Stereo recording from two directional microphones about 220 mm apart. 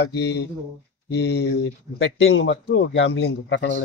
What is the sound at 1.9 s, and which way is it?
A man's voice, 60° left (ahead or behind).